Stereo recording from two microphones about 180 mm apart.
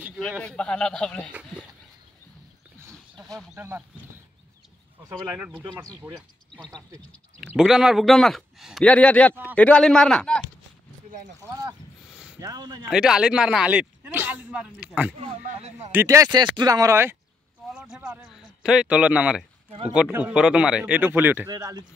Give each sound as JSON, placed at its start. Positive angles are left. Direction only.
{"t": 0.4, "sound": "speech", "side_deg": 5}
{"t": 3.5, "sound": "speech", "side_deg": -10}
{"t": 5.2, "sound": "speech", "side_deg": -10}
{"t": 6.1, "sound": "speech", "side_deg": 5}
{"t": 11.4, "sound": "speech", "side_deg": -15}
{"t": 12.1, "sound": "a sound", "side_deg": -5}
{"t": 12.4, "sound": "a man's voice", "side_deg": -20}
{"t": 12.9, "sound": "speech", "side_deg": -5}
{"t": 15.1, "sound": "speech", "side_deg": -35}
{"t": 15.9, "sound": "a man's voice", "side_deg": -15}